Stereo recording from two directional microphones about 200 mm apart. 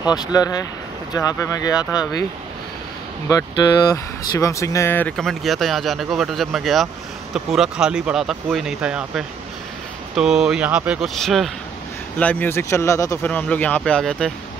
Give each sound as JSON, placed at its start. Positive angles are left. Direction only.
{"t": 0.0, "sound": "speech", "side_deg": 20}
{"t": 3.3, "sound": "speech", "side_deg": 15}